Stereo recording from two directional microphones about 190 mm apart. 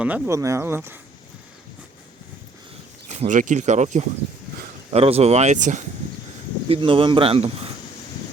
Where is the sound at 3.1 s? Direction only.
40° right (ahead or behind).